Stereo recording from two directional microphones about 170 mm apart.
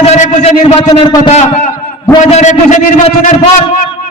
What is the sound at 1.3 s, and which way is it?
A man's voice, 40° left (ahead or behind).